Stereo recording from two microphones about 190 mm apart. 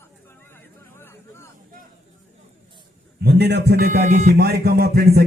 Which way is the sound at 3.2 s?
60° right (ahead or behind).